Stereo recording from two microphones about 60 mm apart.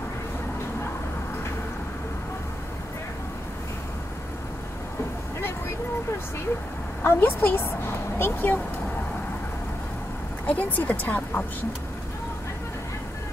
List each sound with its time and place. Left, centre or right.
7.0 s speech: left
10.4 s speech: left